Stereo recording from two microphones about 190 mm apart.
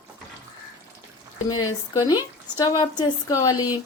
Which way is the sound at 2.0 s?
20° left (ahead or behind).